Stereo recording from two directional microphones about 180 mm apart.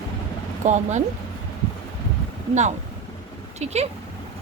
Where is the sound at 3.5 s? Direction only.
35° right (ahead or behind).